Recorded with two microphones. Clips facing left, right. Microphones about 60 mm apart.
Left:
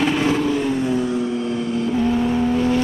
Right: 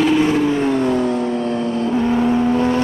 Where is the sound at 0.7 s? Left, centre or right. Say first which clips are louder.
Right 3 dB; right.